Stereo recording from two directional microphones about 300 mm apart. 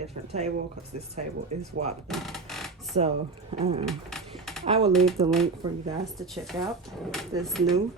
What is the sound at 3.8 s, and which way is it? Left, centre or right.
Speech, centre.